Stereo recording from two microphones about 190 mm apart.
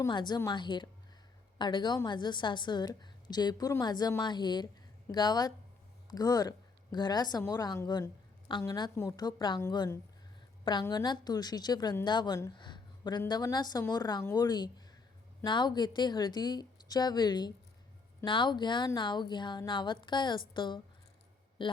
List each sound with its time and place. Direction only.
0.0 s a woman's voice: 25° left (ahead or behind)